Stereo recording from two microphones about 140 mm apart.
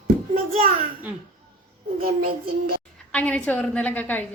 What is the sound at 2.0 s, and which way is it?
Child singing, 90° right.